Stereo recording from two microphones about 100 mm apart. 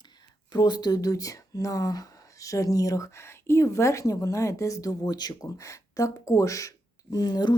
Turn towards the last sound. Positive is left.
turn(degrees=45)  # may be behind; listen again after turning